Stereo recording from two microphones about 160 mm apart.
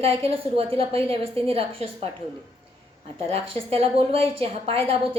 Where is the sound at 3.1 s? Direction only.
40° right (ahead or behind).